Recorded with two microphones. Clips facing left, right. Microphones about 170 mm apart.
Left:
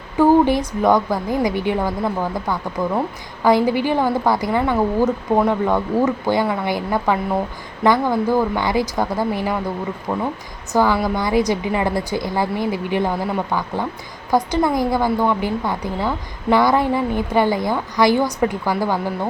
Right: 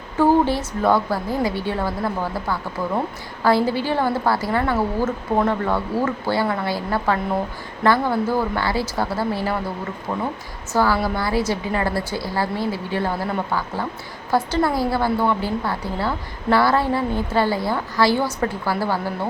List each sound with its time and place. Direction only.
0.2 s a woman's voice: 15° left (ahead or behind)